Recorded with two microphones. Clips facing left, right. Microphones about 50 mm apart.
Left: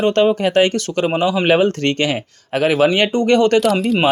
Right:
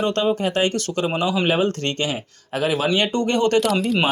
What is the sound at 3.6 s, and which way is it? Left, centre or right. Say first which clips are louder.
Speech: left 4 dB; centre.